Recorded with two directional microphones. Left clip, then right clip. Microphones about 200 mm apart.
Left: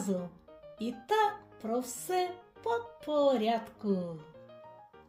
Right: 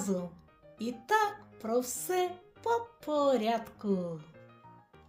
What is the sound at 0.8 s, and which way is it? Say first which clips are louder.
Music: even; 15° right (ahead or behind).